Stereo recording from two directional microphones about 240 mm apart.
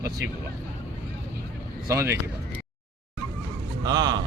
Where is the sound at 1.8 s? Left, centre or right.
Centre.